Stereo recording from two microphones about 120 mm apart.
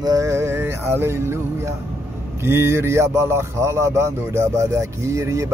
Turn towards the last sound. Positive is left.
turn(degrees=-25)  # may be behind; listen again after turning